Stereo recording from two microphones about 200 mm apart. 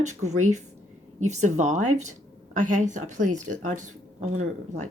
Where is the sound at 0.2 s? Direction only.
35° right (ahead or behind).